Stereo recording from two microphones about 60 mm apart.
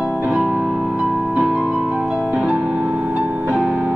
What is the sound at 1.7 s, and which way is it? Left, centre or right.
Music, right.